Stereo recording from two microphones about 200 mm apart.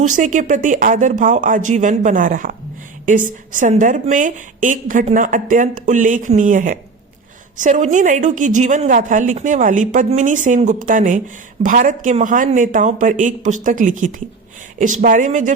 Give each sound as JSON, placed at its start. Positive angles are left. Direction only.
{"t": 0.0, "sound": "a woman's voice", "side_deg": -40}